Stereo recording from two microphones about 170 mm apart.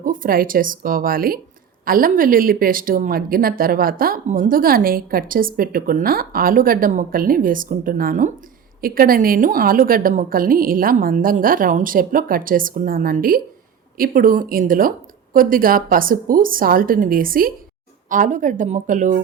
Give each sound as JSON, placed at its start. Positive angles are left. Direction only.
{"t": 0.0, "sound": "speech", "side_deg": -55}